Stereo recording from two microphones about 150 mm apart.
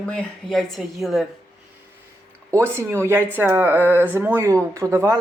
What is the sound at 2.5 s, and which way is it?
A woman's voice, 20° right (ahead or behind).